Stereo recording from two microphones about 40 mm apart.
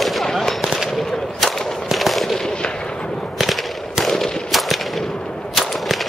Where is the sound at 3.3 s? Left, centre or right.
Centre.